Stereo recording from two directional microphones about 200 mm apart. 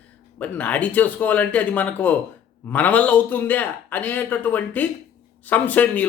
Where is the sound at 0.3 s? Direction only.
5° left (ahead or behind).